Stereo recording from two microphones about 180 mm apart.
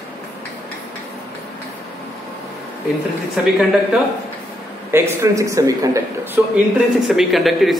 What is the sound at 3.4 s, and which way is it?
Speech, 5° right (ahead or behind).